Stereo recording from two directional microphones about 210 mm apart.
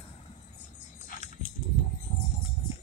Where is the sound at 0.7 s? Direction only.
35° left (ahead or behind).